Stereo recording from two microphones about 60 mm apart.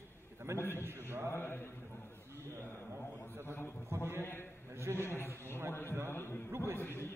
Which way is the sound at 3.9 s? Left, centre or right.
Right.